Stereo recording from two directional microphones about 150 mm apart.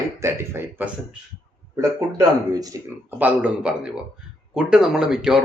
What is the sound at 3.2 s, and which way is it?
A man's voice, 10° right (ahead or behind).